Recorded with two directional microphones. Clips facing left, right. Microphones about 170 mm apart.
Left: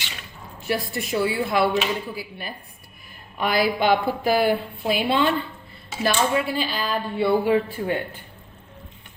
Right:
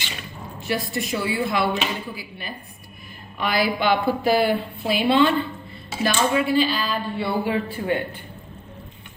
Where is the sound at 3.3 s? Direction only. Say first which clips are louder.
Left 1 dB; 50° left (ahead or behind).